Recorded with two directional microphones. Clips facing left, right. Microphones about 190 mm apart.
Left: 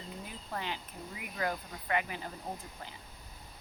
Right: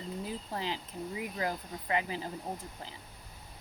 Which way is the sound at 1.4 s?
25° right (ahead or behind).